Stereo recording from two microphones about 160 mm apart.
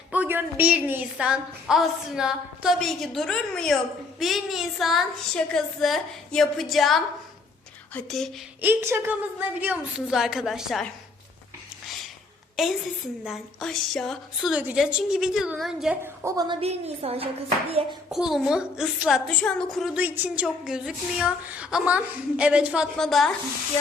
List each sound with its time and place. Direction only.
0.1 s a woman's voice: 10° right (ahead or behind)
8.6 s a woman's voice: 15° right (ahead or behind)
12.6 s a woman's voice: 5° right (ahead or behind)
16.2 s a woman's voice: 25° right (ahead or behind)
16.6 s a woman's voice: 40° right (ahead or behind)
18.1 s a woman's voice: centre (ahead or behind)